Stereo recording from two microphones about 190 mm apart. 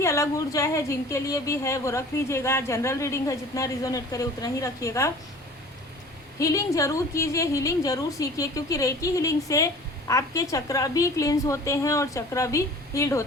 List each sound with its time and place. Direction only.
0.0 s a woman's voice: 15° left (ahead or behind)
6.4 s a woman's voice: 15° left (ahead or behind)